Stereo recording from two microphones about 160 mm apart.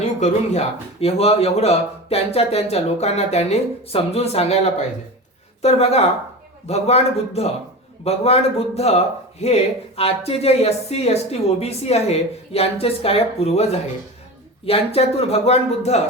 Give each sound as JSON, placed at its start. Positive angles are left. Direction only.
{"t": 0.2, "sound": "speech", "side_deg": 45}